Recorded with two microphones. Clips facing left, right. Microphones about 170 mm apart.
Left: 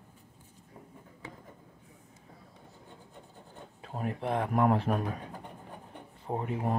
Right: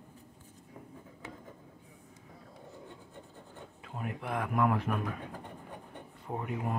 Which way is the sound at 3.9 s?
35° left (ahead or behind).